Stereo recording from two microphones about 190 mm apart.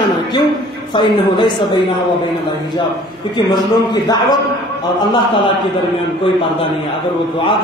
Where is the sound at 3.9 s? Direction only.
20° left (ahead or behind).